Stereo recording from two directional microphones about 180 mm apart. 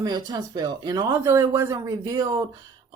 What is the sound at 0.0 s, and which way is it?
Speech, 20° right (ahead or behind).